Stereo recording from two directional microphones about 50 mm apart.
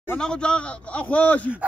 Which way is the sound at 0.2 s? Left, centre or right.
Centre.